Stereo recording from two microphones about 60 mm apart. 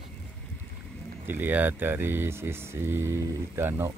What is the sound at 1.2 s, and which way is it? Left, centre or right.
Speech, right.